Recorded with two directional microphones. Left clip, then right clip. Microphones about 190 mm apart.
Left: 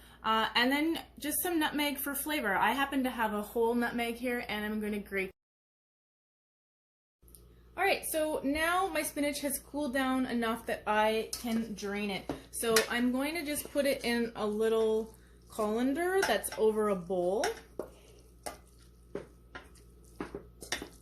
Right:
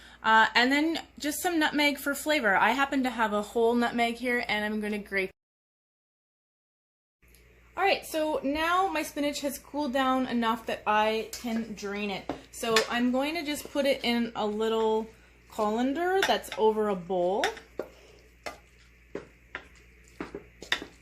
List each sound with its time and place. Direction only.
0.2 s a woman's voice: 50° right (ahead or behind)
7.8 s a woman's voice: 30° right (ahead or behind)